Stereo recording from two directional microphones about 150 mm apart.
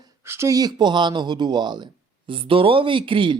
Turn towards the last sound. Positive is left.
turn(degrees=-35)  # may be behind; listen again after turning